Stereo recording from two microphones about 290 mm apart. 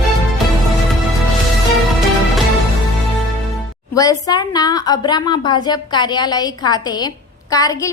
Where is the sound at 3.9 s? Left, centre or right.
Centre.